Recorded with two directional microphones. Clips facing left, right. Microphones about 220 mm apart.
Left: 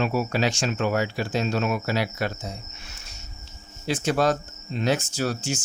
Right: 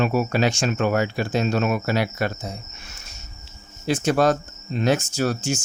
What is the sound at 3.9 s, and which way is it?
Speech, 50° right (ahead or behind).